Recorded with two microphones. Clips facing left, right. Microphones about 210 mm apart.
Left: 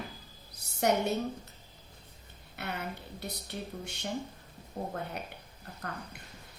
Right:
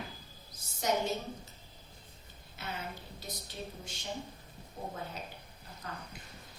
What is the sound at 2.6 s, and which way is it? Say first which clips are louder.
Speech: left 4 dB; 65° left (ahead or behind).